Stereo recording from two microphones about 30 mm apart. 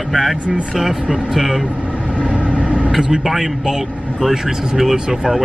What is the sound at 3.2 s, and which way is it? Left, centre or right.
Speech, centre.